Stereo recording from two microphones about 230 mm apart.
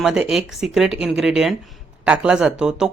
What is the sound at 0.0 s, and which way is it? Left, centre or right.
Speech, centre.